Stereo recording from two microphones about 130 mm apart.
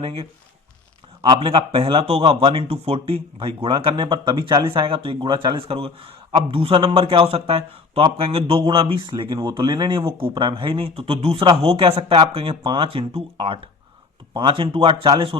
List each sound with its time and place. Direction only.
0.0 s a man's voice: 45° right (ahead or behind)